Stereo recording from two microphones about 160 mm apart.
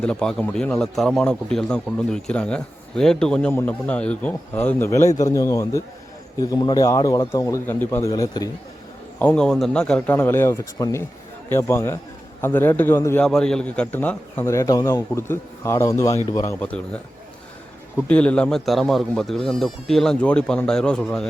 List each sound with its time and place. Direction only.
0.0 s a man's voice: 5° left (ahead or behind); by 8.4 s 25° left (ahead or behind)
9.1 s a man's voice: 10° left (ahead or behind)
13.2 s a man's voice: 5° left (ahead or behind)